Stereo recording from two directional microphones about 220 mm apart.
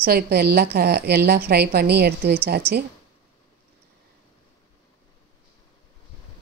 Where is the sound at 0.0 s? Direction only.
45° right (ahead or behind).